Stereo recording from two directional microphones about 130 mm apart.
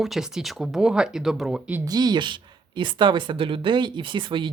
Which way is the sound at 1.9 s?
30° right (ahead or behind).